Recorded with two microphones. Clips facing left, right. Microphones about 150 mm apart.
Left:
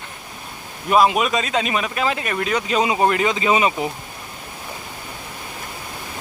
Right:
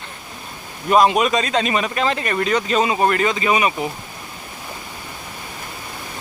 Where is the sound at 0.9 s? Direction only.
5° left (ahead or behind); by 3.8 s 20° left (ahead or behind).